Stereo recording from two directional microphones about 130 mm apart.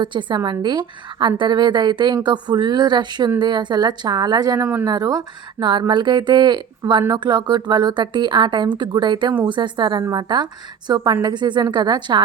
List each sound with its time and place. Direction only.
0.0 s speech: 35° right (ahead or behind)